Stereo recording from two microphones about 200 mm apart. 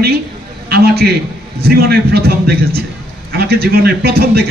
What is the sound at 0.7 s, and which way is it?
A man's voice, 50° right (ahead or behind).